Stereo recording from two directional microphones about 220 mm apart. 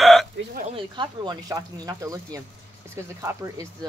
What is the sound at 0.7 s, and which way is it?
Speech, 20° right (ahead or behind).